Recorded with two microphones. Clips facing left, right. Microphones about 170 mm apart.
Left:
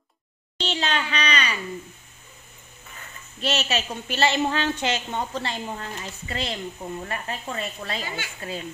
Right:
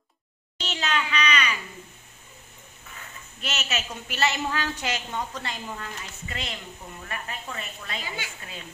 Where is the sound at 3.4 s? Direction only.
30° left (ahead or behind).